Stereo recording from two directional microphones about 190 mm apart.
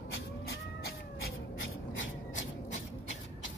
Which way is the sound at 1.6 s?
90° left.